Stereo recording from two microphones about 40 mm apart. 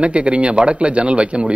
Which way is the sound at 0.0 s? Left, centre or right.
Right.